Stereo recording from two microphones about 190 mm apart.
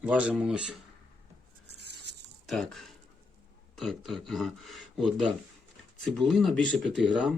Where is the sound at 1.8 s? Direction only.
60° right (ahead or behind).